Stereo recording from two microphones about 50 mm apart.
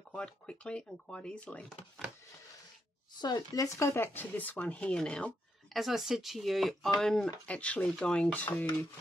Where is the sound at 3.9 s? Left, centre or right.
Left.